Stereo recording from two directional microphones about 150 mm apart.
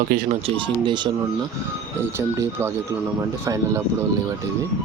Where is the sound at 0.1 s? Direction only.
75° right (ahead or behind).